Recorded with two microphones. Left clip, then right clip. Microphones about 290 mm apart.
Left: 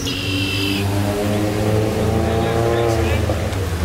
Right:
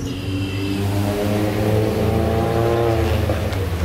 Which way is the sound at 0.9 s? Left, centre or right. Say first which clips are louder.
Left 1 dB; centre.